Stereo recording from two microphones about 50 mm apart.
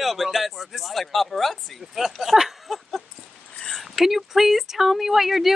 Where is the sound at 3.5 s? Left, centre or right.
Centre.